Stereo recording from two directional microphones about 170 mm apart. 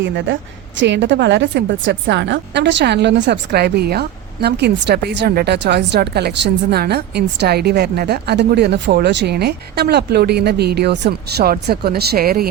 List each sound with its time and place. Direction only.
0.0 s a woman's voice: 90° right; by 12.5 s 60° right (ahead or behind)